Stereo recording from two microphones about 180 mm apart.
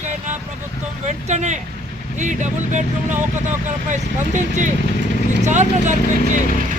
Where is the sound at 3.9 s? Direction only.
40° right (ahead or behind).